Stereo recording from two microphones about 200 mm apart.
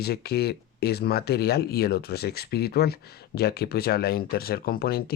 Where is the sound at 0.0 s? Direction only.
50° left (ahead or behind).